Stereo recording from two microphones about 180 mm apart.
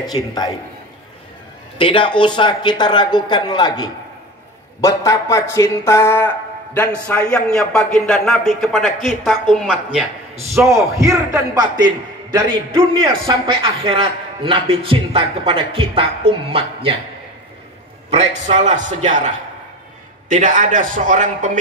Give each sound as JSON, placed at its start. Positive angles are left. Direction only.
{"t": 0.0, "sound": "speech", "side_deg": 20}
{"t": 1.8, "sound": "speech", "side_deg": 30}
{"t": 10.7, "sound": "a man's voice", "side_deg": -15}
{"t": 18.1, "sound": "a man's voice", "side_deg": -40}